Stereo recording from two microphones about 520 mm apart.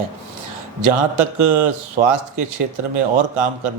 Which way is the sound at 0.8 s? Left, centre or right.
Right.